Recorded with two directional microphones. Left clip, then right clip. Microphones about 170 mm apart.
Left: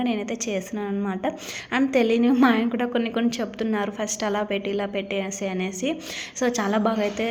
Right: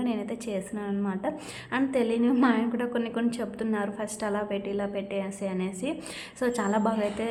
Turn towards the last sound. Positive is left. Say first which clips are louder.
# left 4 dB
turn(degrees=15)  # may be behind; listen again after turning